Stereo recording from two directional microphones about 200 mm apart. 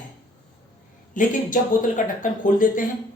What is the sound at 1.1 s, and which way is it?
Speech, 40° left (ahead or behind).